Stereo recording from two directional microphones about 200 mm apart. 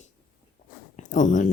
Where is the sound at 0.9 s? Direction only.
40° left (ahead or behind).